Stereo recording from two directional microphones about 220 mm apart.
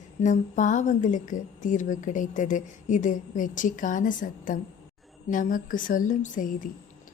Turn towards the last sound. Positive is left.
turn(degrees=40)  # may be behind; listen again after turning